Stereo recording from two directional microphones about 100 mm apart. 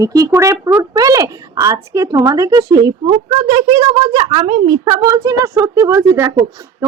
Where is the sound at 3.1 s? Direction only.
65° right (ahead or behind).